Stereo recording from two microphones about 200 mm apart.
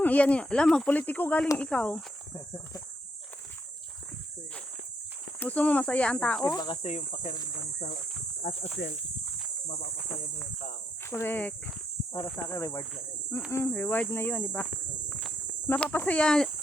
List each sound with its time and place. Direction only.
0.0 s speech: 5° left (ahead or behind)
5.4 s speech: 5° left (ahead or behind)
6.4 s cricket: 20° left (ahead or behind)
6.8 s speech: 35° left (ahead or behind)
11.0 s speech: 10° left (ahead or behind)
15.1 s cricket: 10° left (ahead or behind)